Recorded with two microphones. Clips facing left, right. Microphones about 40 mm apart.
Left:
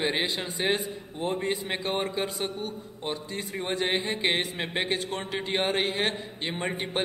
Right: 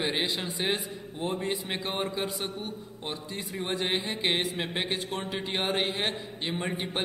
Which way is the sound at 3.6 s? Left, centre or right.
Centre.